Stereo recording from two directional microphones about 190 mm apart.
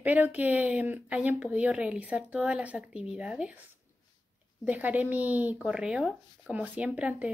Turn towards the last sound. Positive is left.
turn(degrees=-5)  # may be behind; listen again after turning